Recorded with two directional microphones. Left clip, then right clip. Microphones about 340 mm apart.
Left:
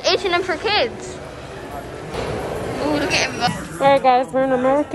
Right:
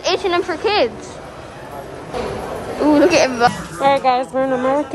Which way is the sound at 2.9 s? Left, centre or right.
Right.